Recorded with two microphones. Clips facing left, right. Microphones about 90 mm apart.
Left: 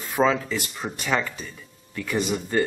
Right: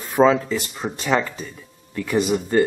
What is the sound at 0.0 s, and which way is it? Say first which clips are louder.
Speech: right 5 dB; 10° right (ahead or behind).